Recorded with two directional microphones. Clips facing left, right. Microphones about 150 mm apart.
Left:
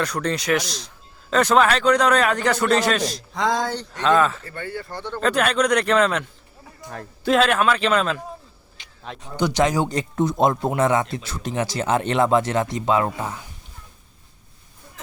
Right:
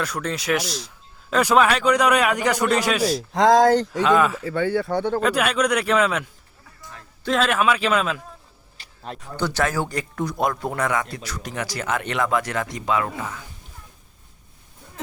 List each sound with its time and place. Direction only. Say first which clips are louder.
0.0 s speech: left 3 dB; 5° right (ahead or behind)
3.5 s speech: right 9 dB; 90° right
3.9 s speech: even; 10° right (ahead or behind)
4.5 s speech: right 10 dB; 90° right; by 5.2 s 65° right (ahead or behind)
5.2 s speech: left 1 dB; 10° right (ahead or behind)
7.3 s speech: left 2 dB; centre (ahead or behind)
9.2 s speech: left 4 dB; 15° left (ahead or behind)